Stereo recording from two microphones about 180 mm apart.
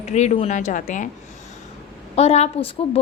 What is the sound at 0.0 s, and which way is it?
A woman's voice, 40° left (ahead or behind).